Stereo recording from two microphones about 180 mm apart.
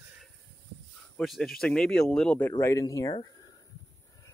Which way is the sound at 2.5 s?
15° left (ahead or behind).